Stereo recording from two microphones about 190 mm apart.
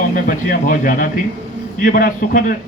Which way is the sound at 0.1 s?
45° left (ahead or behind).